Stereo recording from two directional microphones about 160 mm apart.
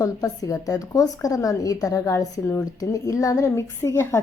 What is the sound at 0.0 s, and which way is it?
A woman's voice, 20° left (ahead or behind).